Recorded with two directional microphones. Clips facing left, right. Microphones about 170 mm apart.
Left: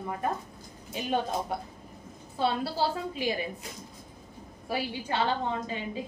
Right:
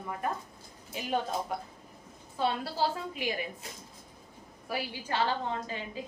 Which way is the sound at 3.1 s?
30° left (ahead or behind).